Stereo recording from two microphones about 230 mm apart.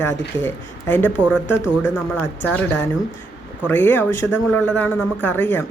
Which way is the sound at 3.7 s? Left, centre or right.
Centre.